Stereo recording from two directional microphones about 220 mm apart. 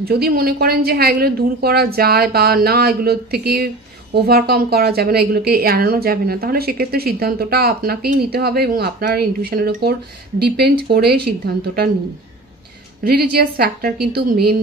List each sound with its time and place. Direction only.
0.0 s a woman's voice: 45° right (ahead or behind)
13.0 s a woman's voice: 45° right (ahead or behind)